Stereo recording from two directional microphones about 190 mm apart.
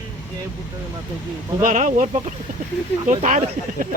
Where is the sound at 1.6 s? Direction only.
40° right (ahead or behind).